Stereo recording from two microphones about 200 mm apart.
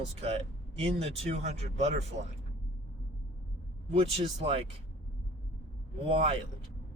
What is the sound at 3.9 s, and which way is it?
Speech, 30° right (ahead or behind).